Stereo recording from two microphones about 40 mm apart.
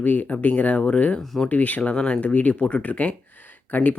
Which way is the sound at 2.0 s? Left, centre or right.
Left.